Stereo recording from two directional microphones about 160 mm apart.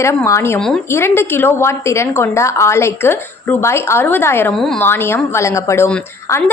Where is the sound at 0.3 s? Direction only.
15° left (ahead or behind).